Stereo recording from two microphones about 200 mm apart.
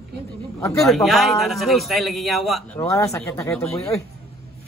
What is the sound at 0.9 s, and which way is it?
A man's voice, centre (ahead or behind).